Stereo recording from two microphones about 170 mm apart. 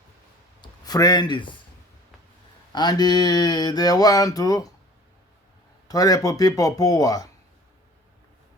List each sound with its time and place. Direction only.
0.6 s a man's voice: 25° left (ahead or behind)
2.7 s mantra: 25° left (ahead or behind)
5.9 s mantra: 20° left (ahead or behind)